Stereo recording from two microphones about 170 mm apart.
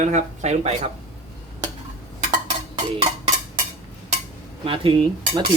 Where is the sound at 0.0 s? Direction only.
45° right (ahead or behind).